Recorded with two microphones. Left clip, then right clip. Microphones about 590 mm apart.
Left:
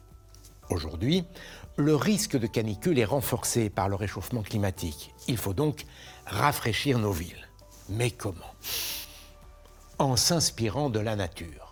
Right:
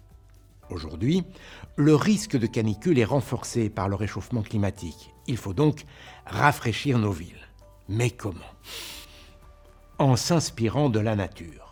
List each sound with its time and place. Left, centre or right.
0.7 s speech: right
7.9 s speech: right